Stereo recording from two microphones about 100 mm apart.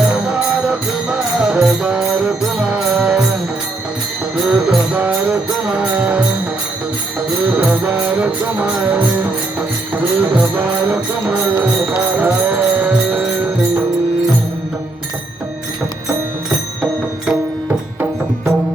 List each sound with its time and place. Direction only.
0.0 s music: 10° right (ahead or behind)
4.4 s music: 5° right (ahead or behind)
7.4 s music: 15° right (ahead or behind)